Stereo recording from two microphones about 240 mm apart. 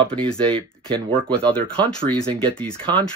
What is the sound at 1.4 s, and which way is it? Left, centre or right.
Speech, centre.